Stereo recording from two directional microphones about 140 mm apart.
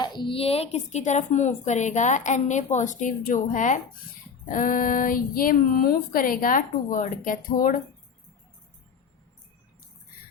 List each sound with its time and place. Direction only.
0.0 s a woman's voice: 35° left (ahead or behind); by 3.8 s 65° left (ahead or behind)
4.4 s female singing: 75° left (ahead or behind)